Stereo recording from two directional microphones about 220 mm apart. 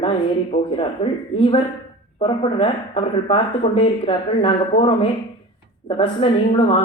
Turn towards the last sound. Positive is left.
turn(degrees=25)  # may be behind; listen again after turning